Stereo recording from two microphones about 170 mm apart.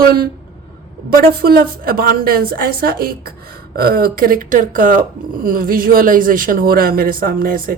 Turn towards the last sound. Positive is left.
turn(degrees=-55)  # may be behind; listen again after turning